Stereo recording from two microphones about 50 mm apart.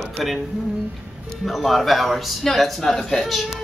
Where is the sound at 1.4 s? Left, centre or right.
Centre.